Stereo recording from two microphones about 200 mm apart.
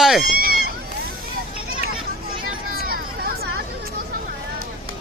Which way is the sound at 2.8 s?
50° right (ahead or behind).